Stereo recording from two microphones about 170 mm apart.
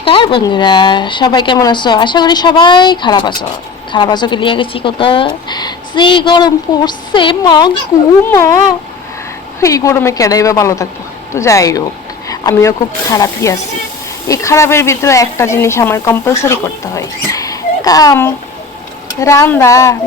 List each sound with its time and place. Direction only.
0.0 s speech: 30° left (ahead or behind)
8.2 s speech: 15° left (ahead or behind)
9.6 s speech: 20° left (ahead or behind)